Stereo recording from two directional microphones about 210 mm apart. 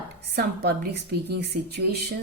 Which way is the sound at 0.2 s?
50° right (ahead or behind).